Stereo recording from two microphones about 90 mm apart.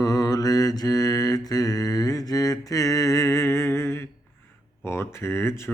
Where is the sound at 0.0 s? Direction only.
45° left (ahead or behind).